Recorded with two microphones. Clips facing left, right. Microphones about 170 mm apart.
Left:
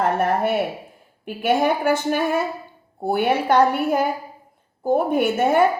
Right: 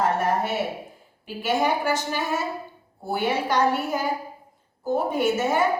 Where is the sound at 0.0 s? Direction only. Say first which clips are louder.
Left 3 dB; 55° left (ahead or behind).